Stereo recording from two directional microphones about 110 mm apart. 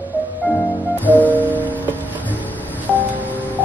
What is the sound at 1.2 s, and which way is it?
Music, 15° right (ahead or behind).